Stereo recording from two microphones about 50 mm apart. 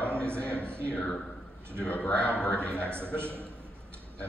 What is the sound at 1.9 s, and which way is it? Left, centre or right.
Speech, left.